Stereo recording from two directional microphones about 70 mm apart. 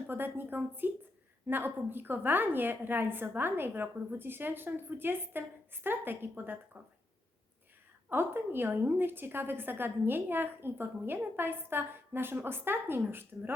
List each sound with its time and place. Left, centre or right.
0.1 s a woman's voice: right
8.1 s a woman's voice: right